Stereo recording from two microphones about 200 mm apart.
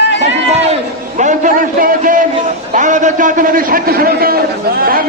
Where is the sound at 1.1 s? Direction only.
40° right (ahead or behind).